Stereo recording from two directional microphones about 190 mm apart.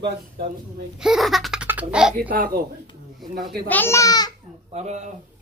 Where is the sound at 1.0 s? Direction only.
Centre (ahead or behind).